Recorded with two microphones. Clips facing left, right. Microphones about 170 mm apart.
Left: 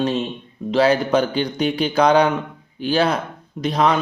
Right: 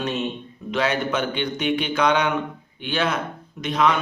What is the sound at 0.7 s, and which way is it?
Speech, 35° left (ahead or behind).